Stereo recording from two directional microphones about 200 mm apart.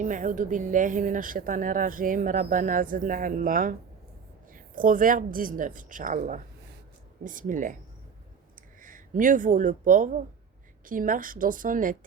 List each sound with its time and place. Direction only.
0.0 s speech: 40° right (ahead or behind)
8.8 s speech: 40° right (ahead or behind)